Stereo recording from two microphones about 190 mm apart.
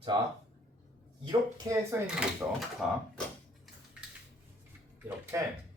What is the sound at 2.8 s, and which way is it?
Mechanisms, 5° right (ahead or behind).